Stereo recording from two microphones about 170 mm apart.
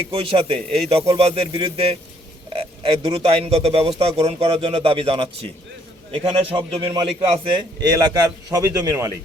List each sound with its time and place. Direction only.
0.1 s a man's voice: 30° right (ahead or behind)